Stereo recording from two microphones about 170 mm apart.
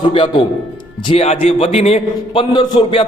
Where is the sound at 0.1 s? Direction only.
30° left (ahead or behind).